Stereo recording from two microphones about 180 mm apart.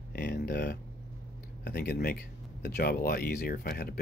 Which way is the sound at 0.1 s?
60° left (ahead or behind).